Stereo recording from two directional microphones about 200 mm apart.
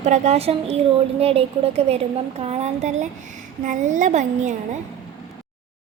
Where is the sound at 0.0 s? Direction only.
35° right (ahead or behind).